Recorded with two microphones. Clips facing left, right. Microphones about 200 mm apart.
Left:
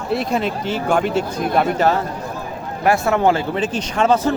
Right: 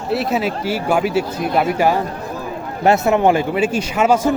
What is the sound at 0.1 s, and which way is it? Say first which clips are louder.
Speech: right 1 dB; 5° right (ahead or behind).